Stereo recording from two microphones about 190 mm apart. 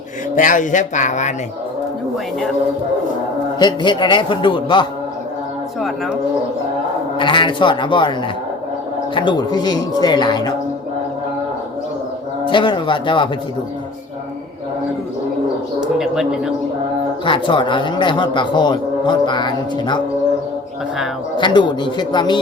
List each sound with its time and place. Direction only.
0.3 s speech: 45° left (ahead or behind)
3.6 s speech: 25° left (ahead or behind)
7.2 s speech: 25° left (ahead or behind)
9.1 s speech: 25° left (ahead or behind)
12.5 s speech: 25° left (ahead or behind)
15.8 s speech: 5° right (ahead or behind)
17.2 s speech: 25° left (ahead or behind)
21.3 s speech: 25° left (ahead or behind)